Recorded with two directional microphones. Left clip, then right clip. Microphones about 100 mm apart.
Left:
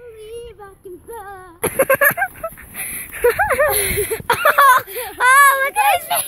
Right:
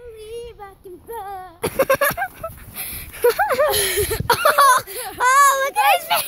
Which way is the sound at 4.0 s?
25° right (ahead or behind).